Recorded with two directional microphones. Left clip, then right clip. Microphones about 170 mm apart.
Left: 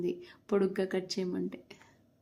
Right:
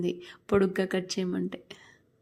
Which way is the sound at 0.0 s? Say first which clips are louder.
Right 3 dB; 20° right (ahead or behind).